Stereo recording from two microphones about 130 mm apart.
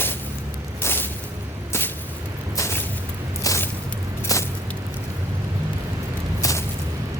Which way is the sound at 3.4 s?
25° left (ahead or behind).